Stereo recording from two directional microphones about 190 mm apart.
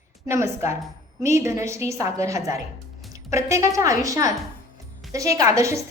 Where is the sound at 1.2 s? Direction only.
15° right (ahead or behind).